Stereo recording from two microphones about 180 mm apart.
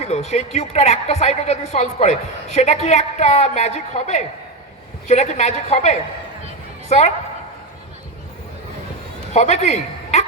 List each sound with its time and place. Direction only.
0.0 s a woman's voice: 35° left (ahead or behind)
9.3 s a woman's voice: 40° left (ahead or behind)